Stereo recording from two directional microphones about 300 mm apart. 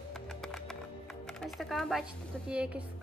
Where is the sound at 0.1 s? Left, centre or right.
Centre.